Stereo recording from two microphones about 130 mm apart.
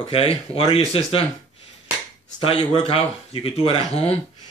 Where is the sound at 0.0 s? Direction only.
45° left (ahead or behind).